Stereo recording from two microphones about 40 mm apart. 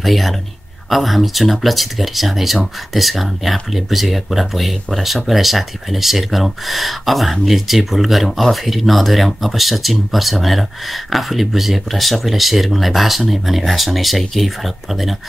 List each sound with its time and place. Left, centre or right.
0.0 s speech: centre